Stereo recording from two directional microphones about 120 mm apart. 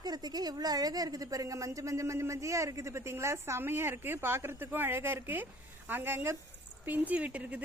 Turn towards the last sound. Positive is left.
turn(degrees=-10)  # may be behind; listen again after turning